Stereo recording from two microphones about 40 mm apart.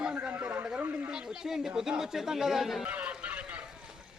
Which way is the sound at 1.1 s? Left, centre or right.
Centre.